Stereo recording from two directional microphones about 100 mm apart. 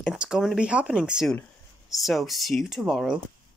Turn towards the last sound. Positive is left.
turn(degrees=0)  # may be behind; listen again after turning